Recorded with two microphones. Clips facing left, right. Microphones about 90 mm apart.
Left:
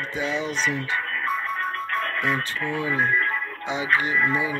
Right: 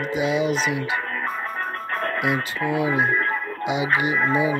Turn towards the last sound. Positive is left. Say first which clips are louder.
# right 3 dB
turn(degrees=-20)  # may be behind; listen again after turning